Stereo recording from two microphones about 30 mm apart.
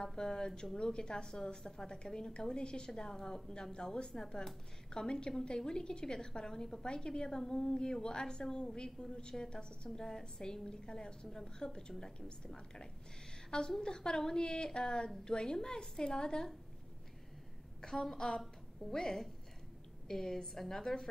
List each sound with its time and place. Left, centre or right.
0.0 s a woman's voice: centre
2.9 s a woman's voice: centre
9.8 s a woman's voice: centre
10.2 s a woman's voice: left
17.8 s a woman's voice: centre